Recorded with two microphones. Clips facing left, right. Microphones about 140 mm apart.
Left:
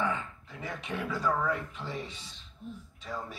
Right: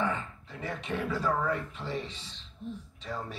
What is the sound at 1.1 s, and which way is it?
Speech, 15° left (ahead or behind).